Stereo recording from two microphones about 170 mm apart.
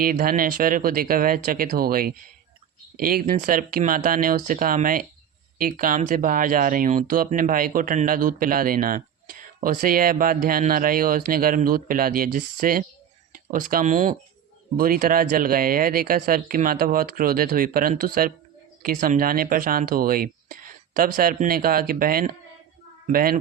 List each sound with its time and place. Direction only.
0.0 s speech: 55° right (ahead or behind)
14.8 s speech: 55° right (ahead or behind)